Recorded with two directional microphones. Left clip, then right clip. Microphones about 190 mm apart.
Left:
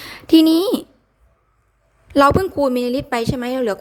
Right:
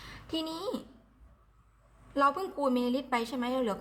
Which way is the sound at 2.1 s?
50° left (ahead or behind).